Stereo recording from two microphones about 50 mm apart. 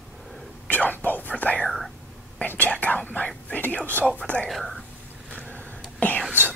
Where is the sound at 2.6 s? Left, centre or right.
Left.